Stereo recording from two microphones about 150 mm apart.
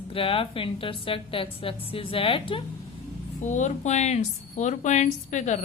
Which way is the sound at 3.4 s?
55° left (ahead or behind).